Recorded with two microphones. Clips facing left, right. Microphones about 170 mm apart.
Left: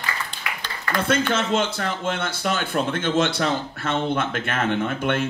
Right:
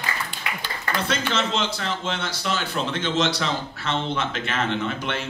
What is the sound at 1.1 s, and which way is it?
A man's voice, 50° left (ahead or behind).